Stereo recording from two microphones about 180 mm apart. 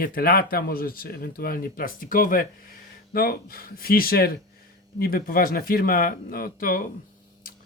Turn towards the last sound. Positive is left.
turn(degrees=50)  # may be behind; listen again after turning